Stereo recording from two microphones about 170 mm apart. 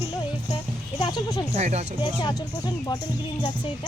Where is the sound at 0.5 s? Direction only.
25° left (ahead or behind).